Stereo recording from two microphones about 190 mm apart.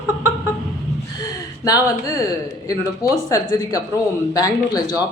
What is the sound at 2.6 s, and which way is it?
A woman's voice, 15° left (ahead or behind).